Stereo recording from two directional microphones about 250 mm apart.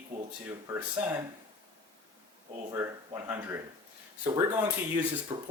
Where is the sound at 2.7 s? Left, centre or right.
Centre.